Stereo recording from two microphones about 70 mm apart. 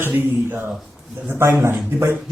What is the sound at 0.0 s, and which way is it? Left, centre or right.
Speech, right.